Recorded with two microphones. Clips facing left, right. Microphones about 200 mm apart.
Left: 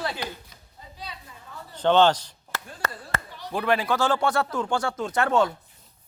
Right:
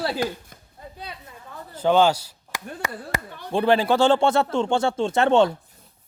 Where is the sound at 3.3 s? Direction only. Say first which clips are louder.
Right 2 dB; 55° right (ahead or behind).